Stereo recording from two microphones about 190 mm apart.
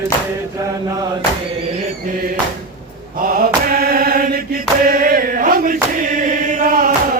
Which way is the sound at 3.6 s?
50° right (ahead or behind).